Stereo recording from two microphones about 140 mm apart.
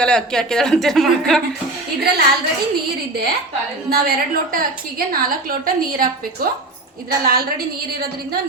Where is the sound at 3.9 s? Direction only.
90° right.